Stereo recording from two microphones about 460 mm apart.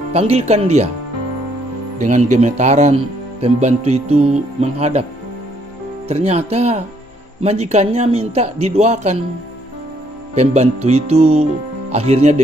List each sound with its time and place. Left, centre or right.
0.1 s speech: centre
2.0 s speech: centre
6.0 s speech: centre
10.3 s speech: centre